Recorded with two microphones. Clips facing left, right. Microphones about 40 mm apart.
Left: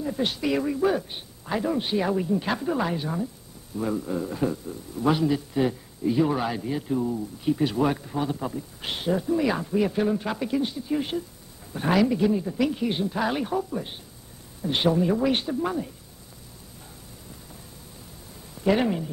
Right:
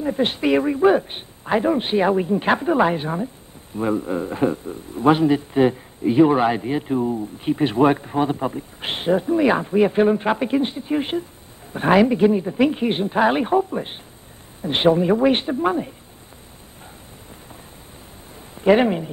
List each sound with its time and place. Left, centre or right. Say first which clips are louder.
0.0 s speech: right 6 dB; right
18.5 s speech: right 7 dB; right